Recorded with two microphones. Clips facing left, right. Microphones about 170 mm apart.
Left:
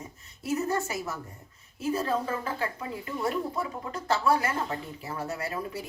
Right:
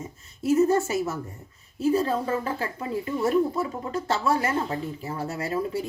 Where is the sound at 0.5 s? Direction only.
30° right (ahead or behind).